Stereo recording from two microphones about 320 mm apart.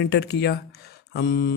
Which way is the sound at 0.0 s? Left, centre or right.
Left.